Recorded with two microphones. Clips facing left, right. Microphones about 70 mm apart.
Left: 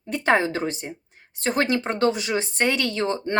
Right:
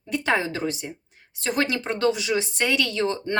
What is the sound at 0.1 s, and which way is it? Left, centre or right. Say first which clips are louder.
Speech: left 3 dB; left.